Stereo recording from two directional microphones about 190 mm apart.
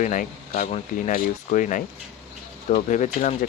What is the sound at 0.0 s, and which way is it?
Speech, 40° left (ahead or behind).